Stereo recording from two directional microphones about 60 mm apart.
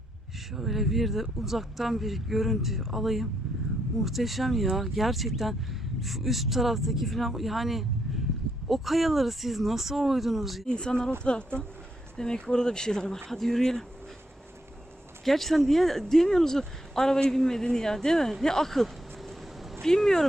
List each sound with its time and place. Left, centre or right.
0.5 s speech: centre
10.7 s speech: centre
15.2 s speech: centre